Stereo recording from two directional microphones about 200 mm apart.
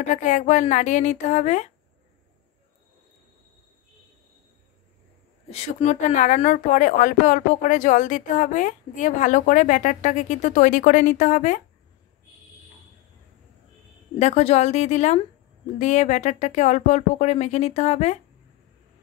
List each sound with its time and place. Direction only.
0.1 s speech: 40° left (ahead or behind)
5.5 s speech: 35° left (ahead or behind)
14.1 s speech: 35° left (ahead or behind)